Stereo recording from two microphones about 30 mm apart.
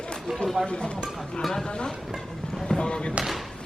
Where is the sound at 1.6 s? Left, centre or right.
Left.